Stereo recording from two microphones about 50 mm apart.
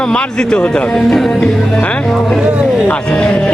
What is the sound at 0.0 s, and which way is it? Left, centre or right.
A man's voice, centre.